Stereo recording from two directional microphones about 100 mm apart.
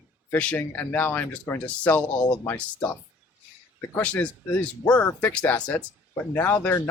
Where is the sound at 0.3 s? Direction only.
15° left (ahead or behind).